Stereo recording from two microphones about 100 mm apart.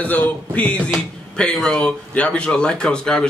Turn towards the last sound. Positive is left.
turn(degrees=5)  # may be behind; listen again after turning